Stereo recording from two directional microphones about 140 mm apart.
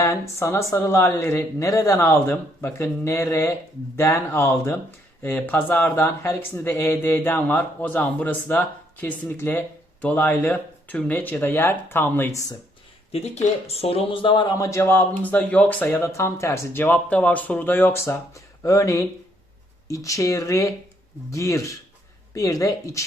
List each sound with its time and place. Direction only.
0.0 s speech: 20° left (ahead or behind)
13.1 s speech: 50° left (ahead or behind); by 23.0 s 25° left (ahead or behind)